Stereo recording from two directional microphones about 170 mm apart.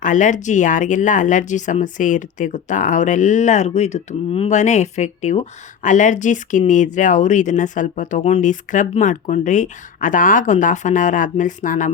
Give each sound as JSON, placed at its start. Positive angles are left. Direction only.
{"t": 0.0, "sound": "speech", "side_deg": 50}